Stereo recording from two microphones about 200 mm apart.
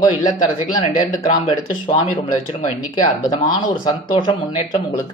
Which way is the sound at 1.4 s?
25° left (ahead or behind).